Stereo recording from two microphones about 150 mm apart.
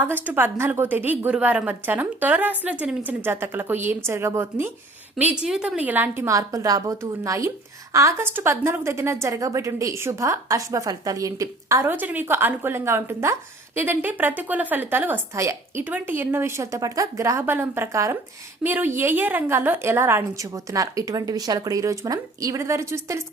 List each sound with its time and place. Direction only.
0.0 s a woman's voice: 10° right (ahead or behind)